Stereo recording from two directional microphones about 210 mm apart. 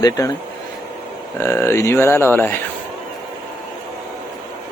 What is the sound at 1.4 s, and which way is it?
Speech, 10° left (ahead or behind).